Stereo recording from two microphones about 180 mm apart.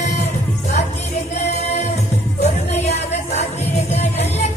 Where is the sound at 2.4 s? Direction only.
40° left (ahead or behind).